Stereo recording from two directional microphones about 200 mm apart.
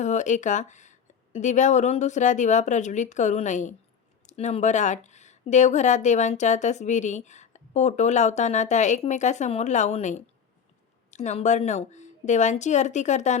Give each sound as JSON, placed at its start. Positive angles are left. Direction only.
{"t": 0.0, "sound": "speech", "side_deg": 35}